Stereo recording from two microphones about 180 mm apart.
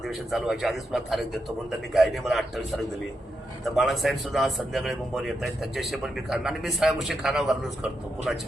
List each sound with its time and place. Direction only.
0.3 s speech: centre (ahead or behind)